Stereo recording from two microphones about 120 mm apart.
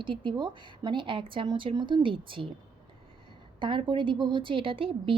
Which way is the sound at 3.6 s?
45° right (ahead or behind).